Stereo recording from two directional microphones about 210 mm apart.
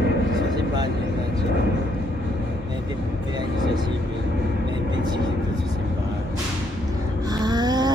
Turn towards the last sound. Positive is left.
turn(degrees=-20)  # may be behind; listen again after turning